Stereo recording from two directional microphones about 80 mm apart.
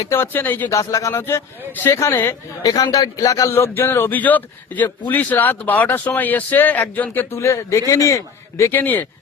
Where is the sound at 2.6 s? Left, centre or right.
Left.